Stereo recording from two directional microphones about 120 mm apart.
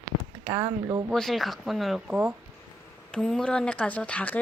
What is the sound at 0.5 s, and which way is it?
Speech, 30° right (ahead or behind).